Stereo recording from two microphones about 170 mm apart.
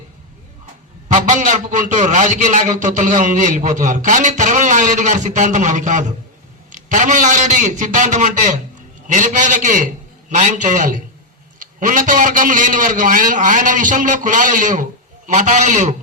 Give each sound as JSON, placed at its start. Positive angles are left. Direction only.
{"t": 1.0, "sound": "a man's voice", "side_deg": -45}